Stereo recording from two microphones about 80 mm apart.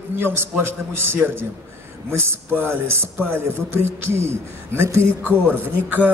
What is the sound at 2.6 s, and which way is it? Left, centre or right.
A man's voice, right.